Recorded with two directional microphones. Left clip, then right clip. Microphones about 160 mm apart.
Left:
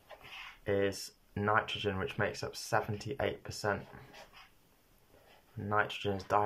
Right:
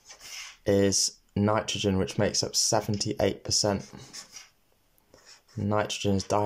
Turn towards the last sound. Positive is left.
turn(degrees=-20)  # may be behind; listen again after turning